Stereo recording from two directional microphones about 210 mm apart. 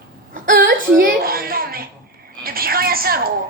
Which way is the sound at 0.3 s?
40° right (ahead or behind).